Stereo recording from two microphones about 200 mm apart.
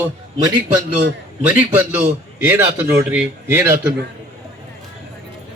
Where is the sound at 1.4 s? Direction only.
5° right (ahead or behind).